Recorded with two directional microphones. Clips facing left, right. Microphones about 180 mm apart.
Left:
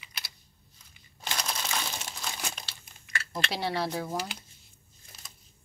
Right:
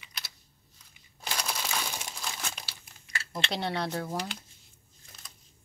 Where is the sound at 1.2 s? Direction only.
10° right (ahead or behind).